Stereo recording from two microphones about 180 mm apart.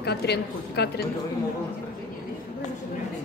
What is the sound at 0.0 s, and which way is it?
A woman's voice, 65° left (ahead or behind).